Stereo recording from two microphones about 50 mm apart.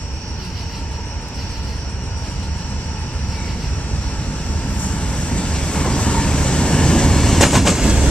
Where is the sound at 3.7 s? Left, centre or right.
Left; by 7.8 s centre.